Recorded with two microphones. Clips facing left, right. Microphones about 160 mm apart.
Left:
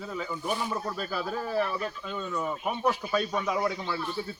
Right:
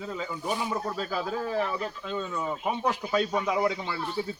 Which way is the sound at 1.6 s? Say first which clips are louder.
Even; 20° right (ahead or behind).